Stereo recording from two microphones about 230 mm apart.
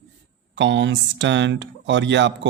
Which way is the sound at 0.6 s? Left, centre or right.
Right.